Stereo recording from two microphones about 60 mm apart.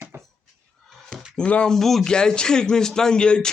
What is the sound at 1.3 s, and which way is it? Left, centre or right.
Speech, centre.